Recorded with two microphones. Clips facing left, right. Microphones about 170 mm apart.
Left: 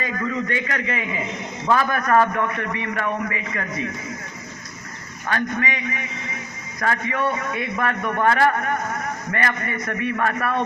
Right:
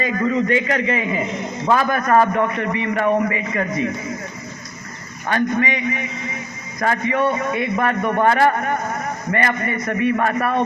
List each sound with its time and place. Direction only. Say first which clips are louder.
0.0 s a man's voice: right 6 dB; 20° right (ahead or behind)
5.3 s a man's voice: right 5 dB; 20° right (ahead or behind)